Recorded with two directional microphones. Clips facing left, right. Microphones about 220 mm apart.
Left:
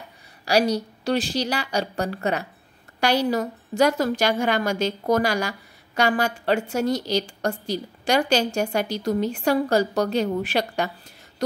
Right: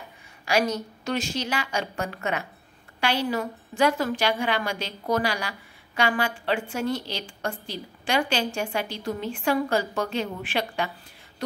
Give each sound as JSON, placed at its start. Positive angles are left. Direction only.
{"t": 0.5, "sound": "a woman's voice", "side_deg": 35}